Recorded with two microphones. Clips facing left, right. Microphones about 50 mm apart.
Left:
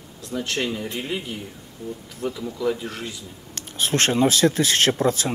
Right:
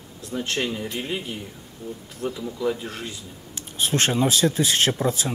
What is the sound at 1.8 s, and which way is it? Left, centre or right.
Speech, left.